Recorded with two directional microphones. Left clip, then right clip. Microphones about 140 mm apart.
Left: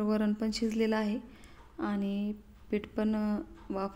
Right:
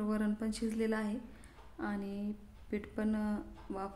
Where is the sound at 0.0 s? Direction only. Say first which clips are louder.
Left 5 dB; 25° left (ahead or behind).